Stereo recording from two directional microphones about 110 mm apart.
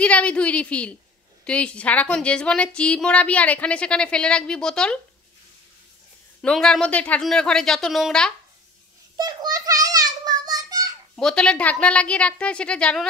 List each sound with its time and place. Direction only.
0.0 s a woman's voice: 10° left (ahead or behind)
6.4 s a woman's voice: 5° left (ahead or behind)
9.1 s a sound: 35° right (ahead or behind)
11.1 s a woman's voice: 5° left (ahead or behind)